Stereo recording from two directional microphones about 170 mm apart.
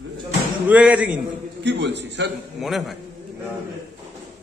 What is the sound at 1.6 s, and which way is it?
Speech, 85° right.